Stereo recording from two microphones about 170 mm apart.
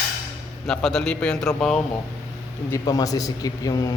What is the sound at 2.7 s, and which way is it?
A man's voice, 20° left (ahead or behind).